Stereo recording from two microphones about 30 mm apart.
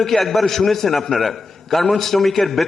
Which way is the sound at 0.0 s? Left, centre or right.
Centre.